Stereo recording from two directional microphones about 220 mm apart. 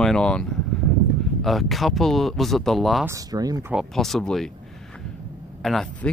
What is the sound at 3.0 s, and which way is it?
Speech, 15° right (ahead or behind).